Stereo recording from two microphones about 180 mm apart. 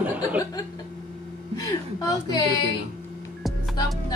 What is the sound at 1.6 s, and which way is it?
Speech, 20° left (ahead or behind).